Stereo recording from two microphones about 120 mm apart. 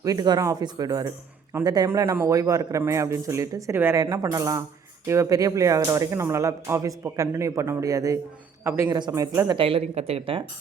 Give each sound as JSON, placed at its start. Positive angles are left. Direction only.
{"t": 0.0, "sound": "speech", "side_deg": -30}
{"t": 9.0, "sound": "speech", "side_deg": -35}
{"t": 9.6, "sound": "speech", "side_deg": -50}